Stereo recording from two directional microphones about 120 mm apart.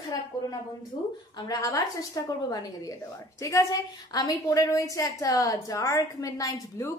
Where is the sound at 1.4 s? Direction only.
30° left (ahead or behind).